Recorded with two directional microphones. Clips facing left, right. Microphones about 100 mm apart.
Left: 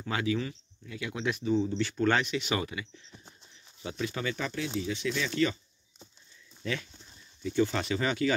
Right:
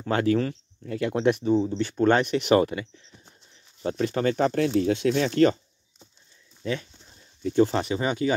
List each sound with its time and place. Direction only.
0.0 s speech: 45° right (ahead or behind)
1.5 s speech: 30° right (ahead or behind)
2.2 s speech: 55° right (ahead or behind)
6.6 s speech: 30° right (ahead or behind)
7.4 s speech: 40° right (ahead or behind)
7.8 s speech: 20° right (ahead or behind)